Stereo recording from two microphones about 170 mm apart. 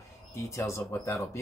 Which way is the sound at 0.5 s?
15° left (ahead or behind).